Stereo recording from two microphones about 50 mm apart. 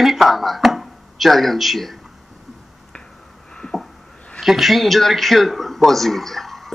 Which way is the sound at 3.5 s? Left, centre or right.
Centre.